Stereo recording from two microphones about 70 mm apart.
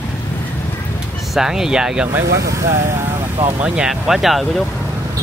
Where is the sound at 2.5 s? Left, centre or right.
Right.